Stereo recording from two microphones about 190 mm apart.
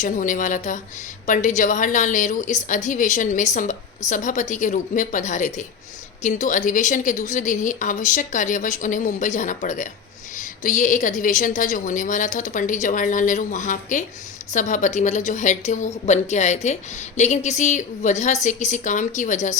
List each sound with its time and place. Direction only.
0.0 s a woman's voice: 45° left (ahead or behind)